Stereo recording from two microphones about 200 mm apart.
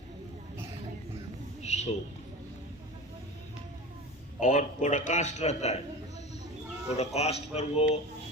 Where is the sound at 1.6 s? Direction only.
35° left (ahead or behind).